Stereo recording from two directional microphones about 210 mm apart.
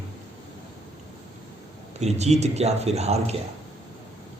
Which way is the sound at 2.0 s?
30° right (ahead or behind).